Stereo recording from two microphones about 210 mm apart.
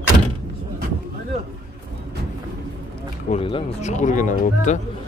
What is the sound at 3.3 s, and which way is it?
Speech, 25° left (ahead or behind).